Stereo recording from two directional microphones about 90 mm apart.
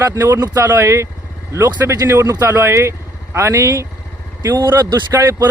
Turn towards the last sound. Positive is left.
turn(degrees=-25)  # may be behind; listen again after turning